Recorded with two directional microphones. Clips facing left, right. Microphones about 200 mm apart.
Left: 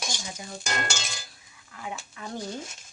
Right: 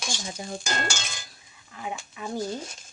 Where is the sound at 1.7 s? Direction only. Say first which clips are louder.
Right 2 dB; 20° right (ahead or behind).